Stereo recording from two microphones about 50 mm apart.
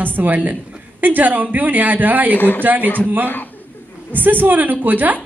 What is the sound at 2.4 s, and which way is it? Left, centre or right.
Speech, left.